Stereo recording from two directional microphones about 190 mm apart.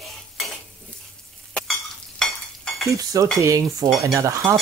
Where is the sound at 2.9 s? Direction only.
15° right (ahead or behind).